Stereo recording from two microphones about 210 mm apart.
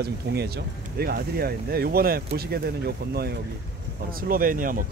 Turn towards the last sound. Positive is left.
turn(degrees=-40)  # may be behind; listen again after turning